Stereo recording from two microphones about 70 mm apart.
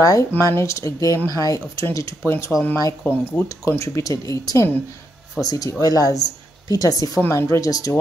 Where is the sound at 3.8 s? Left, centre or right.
Left.